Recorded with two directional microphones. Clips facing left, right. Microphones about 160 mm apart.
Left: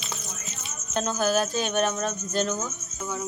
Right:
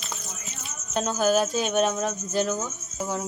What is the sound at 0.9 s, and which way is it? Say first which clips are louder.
Speech: right 2 dB; 10° right (ahead or behind).